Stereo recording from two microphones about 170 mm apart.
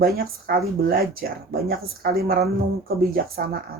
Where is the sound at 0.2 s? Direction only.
60° right (ahead or behind).